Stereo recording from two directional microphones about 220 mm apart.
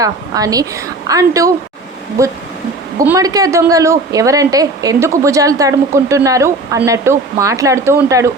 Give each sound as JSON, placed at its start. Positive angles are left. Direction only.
{"t": 0.0, "sound": "a woman's voice", "side_deg": -15}